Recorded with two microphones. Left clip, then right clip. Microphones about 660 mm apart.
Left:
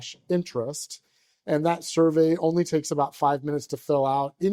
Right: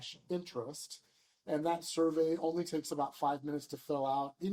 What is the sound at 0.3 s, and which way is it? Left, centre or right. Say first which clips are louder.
Speech: left 13 dB; left.